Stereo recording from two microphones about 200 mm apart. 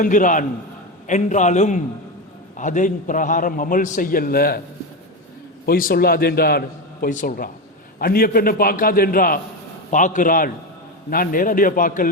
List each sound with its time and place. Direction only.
0.0 s a man's voice: 40° left (ahead or behind)
5.6 s a man's voice: 45° left (ahead or behind)